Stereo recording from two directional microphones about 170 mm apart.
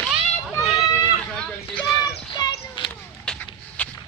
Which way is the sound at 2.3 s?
25° left (ahead or behind).